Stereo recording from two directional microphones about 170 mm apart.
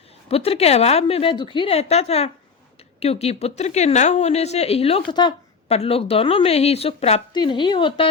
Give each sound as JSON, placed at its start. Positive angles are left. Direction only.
{"t": 0.3, "sound": "speech", "side_deg": 35}
{"t": 5.1, "sound": "a sound", "side_deg": 25}
{"t": 5.7, "sound": "speech", "side_deg": 35}